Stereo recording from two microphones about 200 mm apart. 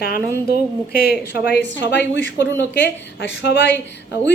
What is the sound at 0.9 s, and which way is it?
Speech, 50° left (ahead or behind).